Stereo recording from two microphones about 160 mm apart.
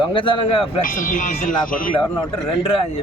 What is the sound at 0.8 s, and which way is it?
Speech, 55° left (ahead or behind).